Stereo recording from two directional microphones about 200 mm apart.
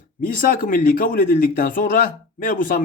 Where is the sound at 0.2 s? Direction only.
45° left (ahead or behind).